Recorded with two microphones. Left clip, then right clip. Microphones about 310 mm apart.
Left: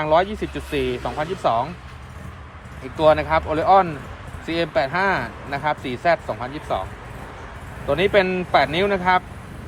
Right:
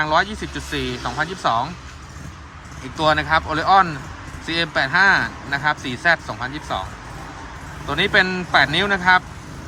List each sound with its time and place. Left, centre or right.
0.0 s speech: centre
3.0 s speech: centre
7.9 s speech: centre